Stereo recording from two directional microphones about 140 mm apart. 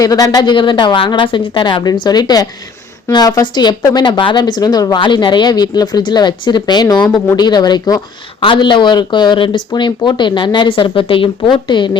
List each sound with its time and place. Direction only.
0.0 s speech: 25° left (ahead or behind)